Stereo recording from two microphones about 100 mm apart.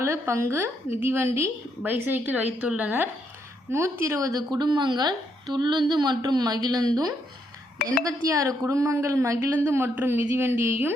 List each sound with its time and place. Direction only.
0.0 s a woman's voice: 25° right (ahead or behind)